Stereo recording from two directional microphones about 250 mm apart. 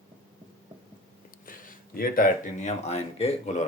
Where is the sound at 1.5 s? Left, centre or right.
Left.